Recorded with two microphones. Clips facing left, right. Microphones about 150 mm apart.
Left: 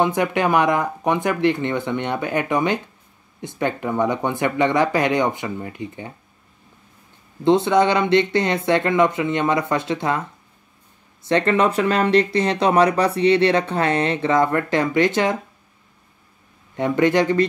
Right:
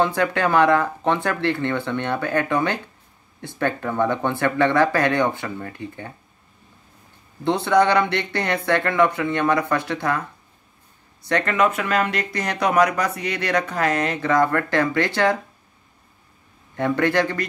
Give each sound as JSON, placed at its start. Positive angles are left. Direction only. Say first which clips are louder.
{"t": 0.0, "sound": "speech", "louder": "left 1 dB", "side_deg": 15}
{"t": 7.4, "sound": "speech", "louder": "left 2 dB", "side_deg": 20}
{"t": 11.2, "sound": "speech", "louder": "left 3 dB", "side_deg": 25}
{"t": 16.7, "sound": "speech", "louder": "left 2 dB", "side_deg": 20}